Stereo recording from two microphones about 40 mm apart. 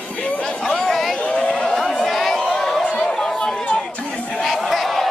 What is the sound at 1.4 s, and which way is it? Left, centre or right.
Speech, centre.